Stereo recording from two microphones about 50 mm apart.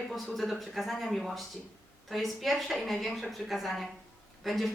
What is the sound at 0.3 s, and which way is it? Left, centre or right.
Speech, centre.